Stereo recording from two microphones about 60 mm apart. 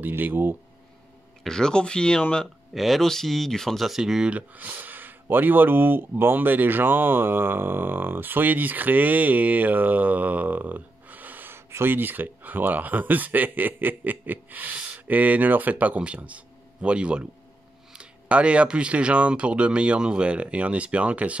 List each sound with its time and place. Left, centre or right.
0.0 s speech: right
1.4 s speech: centre
2.7 s speech: centre
3.8 s speech: centre
4.3 s speech: right
11.5 s speech: right